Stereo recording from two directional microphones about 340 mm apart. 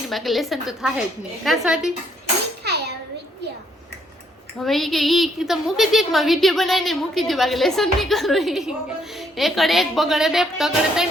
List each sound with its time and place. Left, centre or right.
0.1 s a woman's voice: centre
2.6 s a sound: right
4.6 s a woman's voice: centre